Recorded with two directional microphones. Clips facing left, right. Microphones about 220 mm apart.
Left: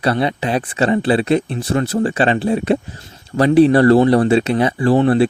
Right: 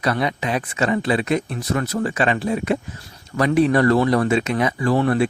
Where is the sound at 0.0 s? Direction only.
30° left (ahead or behind).